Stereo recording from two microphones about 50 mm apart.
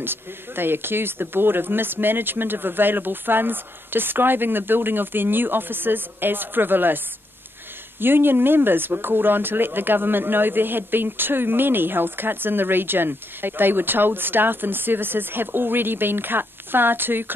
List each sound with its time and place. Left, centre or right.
0.0 s speech: right
8.0 s speech: right